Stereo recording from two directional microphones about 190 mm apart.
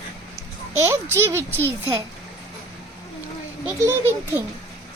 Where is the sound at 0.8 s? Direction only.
10° right (ahead or behind).